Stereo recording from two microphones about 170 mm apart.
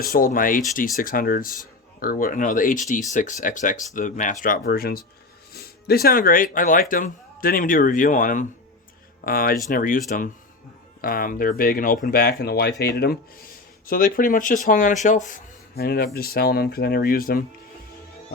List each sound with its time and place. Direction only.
0.0 s speech: 60° left (ahead or behind)
11.0 s speech: 60° left (ahead or behind)
13.8 s speech: 55° left (ahead or behind)
15.7 s speech: 65° left (ahead or behind)